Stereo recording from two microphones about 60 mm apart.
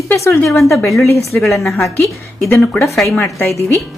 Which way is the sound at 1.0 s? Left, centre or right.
Left.